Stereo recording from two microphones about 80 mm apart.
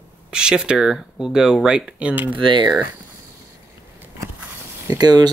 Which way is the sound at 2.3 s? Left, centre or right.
Right.